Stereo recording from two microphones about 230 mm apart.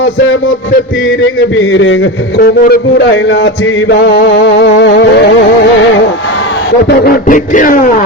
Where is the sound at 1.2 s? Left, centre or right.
Left.